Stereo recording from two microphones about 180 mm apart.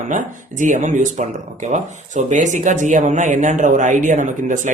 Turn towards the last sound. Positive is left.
turn(degrees=-45)  # may be behind; listen again after turning